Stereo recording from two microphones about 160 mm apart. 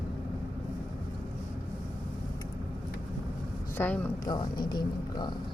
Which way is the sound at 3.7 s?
10° left (ahead or behind).